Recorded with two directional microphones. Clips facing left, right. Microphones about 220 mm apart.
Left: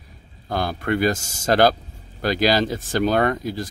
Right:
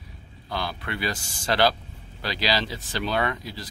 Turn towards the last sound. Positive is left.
turn(degrees=45)  # may be behind; listen again after turning